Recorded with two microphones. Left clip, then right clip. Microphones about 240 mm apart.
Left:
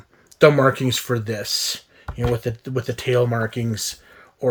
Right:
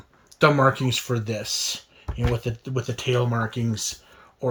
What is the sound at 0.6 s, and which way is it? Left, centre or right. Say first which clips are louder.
Speech: left 2 dB; centre.